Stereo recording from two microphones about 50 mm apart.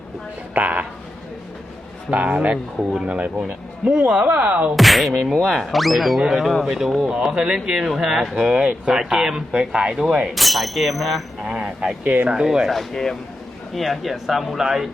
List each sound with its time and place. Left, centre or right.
0.5 s a woman's voice: right
2.0 s speech: right
4.8 s speech: centre
10.2 s speech: centre
11.5 s speech: centre
12.6 s speech: centre